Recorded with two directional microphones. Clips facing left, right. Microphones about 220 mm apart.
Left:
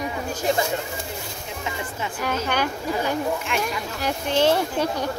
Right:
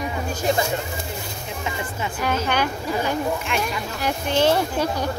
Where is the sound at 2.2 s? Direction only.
45° left (ahead or behind).